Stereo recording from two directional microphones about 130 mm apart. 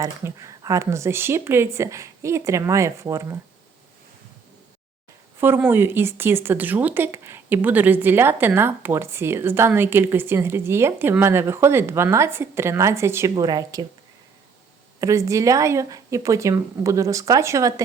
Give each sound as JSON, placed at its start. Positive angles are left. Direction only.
{"t": 0.0, "sound": "speech", "side_deg": -25}
{"t": 5.5, "sound": "speech", "side_deg": -15}
{"t": 13.3, "sound": "speech", "side_deg": -30}
{"t": 15.0, "sound": "speech", "side_deg": -25}